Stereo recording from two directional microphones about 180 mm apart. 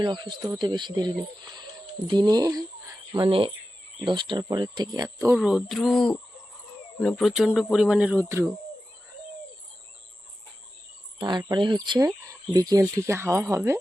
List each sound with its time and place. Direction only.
0.0 s speech: 25° right (ahead or behind)
5.3 s speech: 5° right (ahead or behind)
11.2 s speech: 25° right (ahead or behind)